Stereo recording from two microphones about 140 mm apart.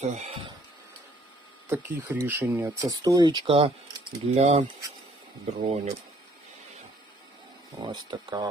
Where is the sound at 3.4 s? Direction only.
40° right (ahead or behind).